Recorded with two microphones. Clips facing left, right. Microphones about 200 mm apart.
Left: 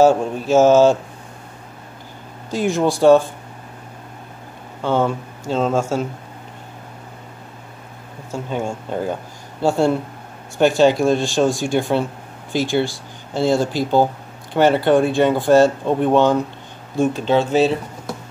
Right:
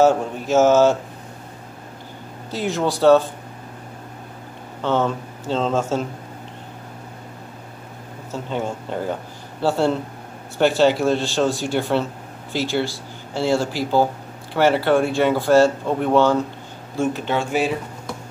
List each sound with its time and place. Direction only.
0.0 s speech: 15° left (ahead or behind)
2.5 s speech: 15° left (ahead or behind)
4.8 s speech: 10° left (ahead or behind)
8.3 s speech: 10° left (ahead or behind)